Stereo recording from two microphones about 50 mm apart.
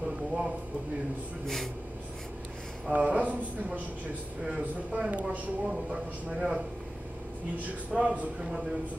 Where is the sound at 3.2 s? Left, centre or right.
Right.